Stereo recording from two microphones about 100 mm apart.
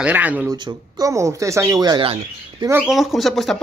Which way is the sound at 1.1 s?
30° right (ahead or behind).